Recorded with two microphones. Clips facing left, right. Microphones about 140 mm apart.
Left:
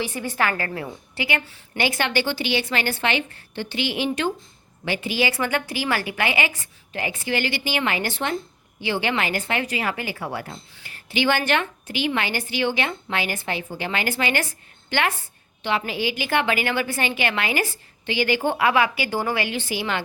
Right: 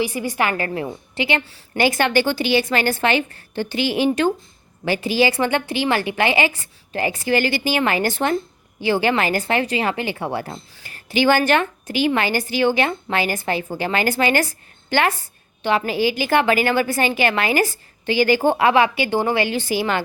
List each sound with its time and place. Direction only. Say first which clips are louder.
0.0 s a woman's voice: right 3 dB; 10° right (ahead or behind); by 1.6 s 30° right (ahead or behind)
1.7 s a woman's voice: right 6 dB; 45° right (ahead or behind); by 10.4 s 25° right (ahead or behind)
10.4 s a woman's voice: right 4 dB; 40° right (ahead or behind)